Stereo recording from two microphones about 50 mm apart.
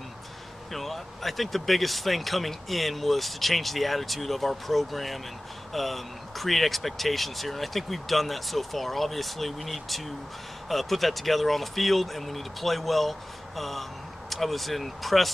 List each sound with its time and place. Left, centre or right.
0.7 s speech: centre